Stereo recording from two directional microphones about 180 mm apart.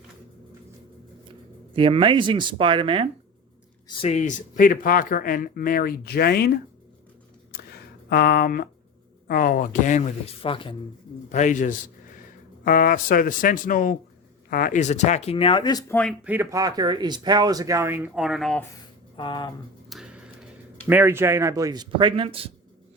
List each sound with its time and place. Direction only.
1.7 s speech: 30° right (ahead or behind)
3.8 s speech: 35° left (ahead or behind); by 6.5 s 60° left (ahead or behind)
8.1 s speech: 55° left (ahead or behind); by 10.8 s 30° left (ahead or behind)
11.3 s speech: 40° left (ahead or behind); by 16.0 s 20° left (ahead or behind)
16.2 s speech: 10° right (ahead or behind)
19.1 s speech: 25° left (ahead or behind)
19.9 s speech: 5° right (ahead or behind); by 22.4 s 30° right (ahead or behind)